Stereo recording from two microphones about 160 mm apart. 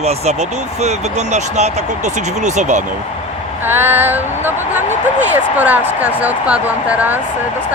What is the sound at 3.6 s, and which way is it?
Speech, 15° right (ahead or behind).